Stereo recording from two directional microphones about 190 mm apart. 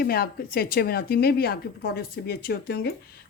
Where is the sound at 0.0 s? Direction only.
50° left (ahead or behind).